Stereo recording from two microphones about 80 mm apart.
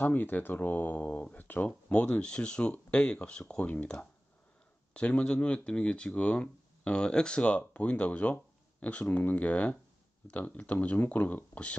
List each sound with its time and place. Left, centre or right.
0.0 s speech: left